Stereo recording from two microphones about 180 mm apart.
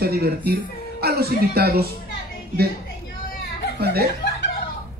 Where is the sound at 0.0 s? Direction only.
60° right (ahead or behind).